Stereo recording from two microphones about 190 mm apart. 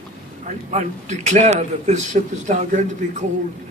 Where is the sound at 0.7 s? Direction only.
40° right (ahead or behind).